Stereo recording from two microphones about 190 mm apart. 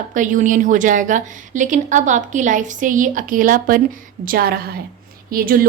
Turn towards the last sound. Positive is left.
turn(degrees=-50)  # may be behind; listen again after turning